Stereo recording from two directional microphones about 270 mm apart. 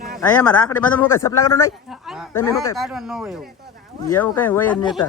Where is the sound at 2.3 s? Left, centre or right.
Centre.